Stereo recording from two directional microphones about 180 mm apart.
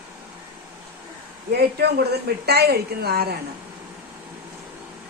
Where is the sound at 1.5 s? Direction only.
65° right (ahead or behind).